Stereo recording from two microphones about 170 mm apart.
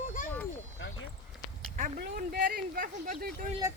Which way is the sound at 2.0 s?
65° right (ahead or behind).